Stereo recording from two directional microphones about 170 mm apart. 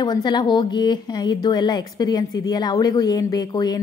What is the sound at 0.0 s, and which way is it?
A woman's voice, 25° left (ahead or behind).